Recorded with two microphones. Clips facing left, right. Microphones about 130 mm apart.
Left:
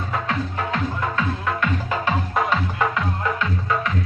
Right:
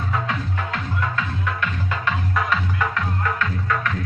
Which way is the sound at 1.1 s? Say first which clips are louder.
Left 3 dB; 35° left (ahead or behind).